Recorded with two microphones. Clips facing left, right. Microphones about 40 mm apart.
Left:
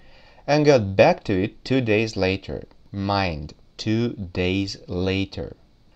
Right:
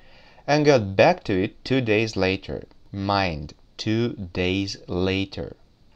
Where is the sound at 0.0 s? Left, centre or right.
Centre.